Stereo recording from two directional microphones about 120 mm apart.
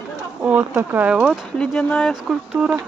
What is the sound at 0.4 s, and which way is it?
Speech, 15° right (ahead or behind).